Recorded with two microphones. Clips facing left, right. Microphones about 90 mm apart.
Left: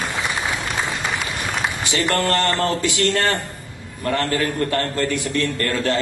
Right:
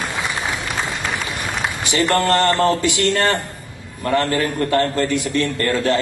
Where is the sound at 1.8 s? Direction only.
20° right (ahead or behind).